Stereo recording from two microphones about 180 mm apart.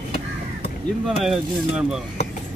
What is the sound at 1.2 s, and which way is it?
Speech, 5° right (ahead or behind).